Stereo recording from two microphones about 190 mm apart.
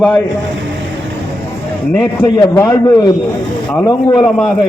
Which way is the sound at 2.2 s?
15° left (ahead or behind).